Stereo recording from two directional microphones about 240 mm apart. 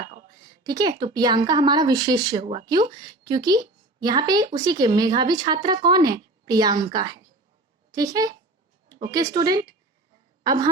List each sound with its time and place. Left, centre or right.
0.6 s a woman's voice: centre